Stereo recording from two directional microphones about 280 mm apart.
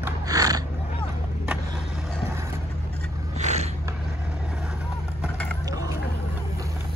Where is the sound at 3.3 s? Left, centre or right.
Right.